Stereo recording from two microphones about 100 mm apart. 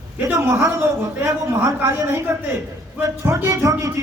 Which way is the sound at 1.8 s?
20° right (ahead or behind).